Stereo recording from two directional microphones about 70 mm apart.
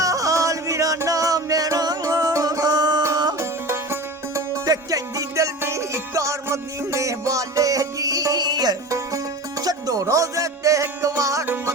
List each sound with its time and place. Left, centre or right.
0.0 s music: right
2.3 s music: right
3.3 s music: right
4.4 s music: right
5.6 s music: right
8.9 s music: right